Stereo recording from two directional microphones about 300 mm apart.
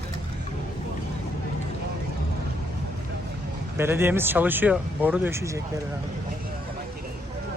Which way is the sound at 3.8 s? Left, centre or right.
Centre.